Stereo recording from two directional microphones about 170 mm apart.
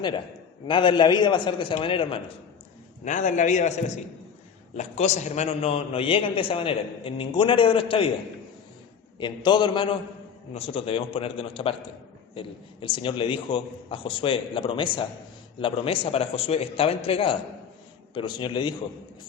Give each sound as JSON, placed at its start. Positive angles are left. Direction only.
{"t": 0.7, "sound": "a man's voice", "side_deg": 30}
{"t": 3.0, "sound": "a man's voice", "side_deg": 45}
{"t": 9.1, "sound": "a man's voice", "side_deg": 25}